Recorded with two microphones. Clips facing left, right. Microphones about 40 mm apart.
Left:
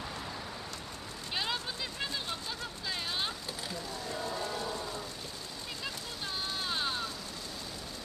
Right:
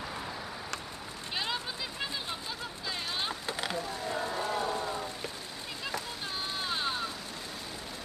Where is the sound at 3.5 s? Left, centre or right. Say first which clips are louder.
Right 6 dB; right.